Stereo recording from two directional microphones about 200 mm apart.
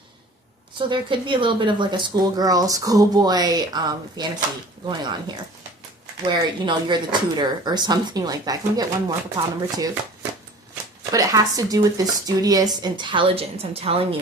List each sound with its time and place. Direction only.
0.8 s a woman's voice: 25° right (ahead or behind)
6.3 s a woman's voice: 20° right (ahead or behind)
11.1 s a woman's voice: 15° right (ahead or behind)